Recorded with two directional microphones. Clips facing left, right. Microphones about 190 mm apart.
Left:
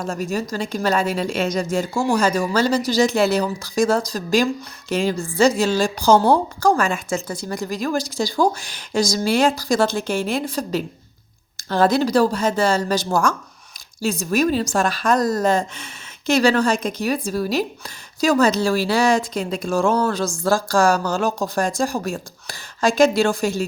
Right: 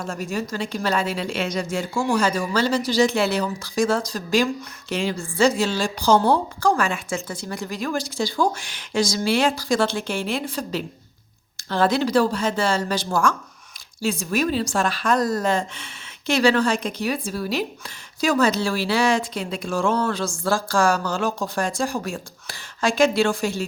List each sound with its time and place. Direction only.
0.0 s speech: 40° left (ahead or behind)